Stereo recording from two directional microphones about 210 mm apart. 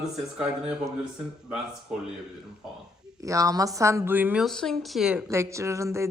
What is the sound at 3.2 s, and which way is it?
Speech, 15° right (ahead or behind).